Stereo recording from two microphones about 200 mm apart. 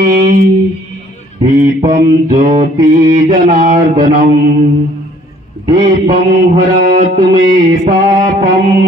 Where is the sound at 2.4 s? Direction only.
40° right (ahead or behind).